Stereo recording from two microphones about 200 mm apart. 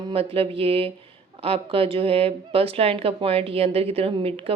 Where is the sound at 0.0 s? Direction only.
30° right (ahead or behind).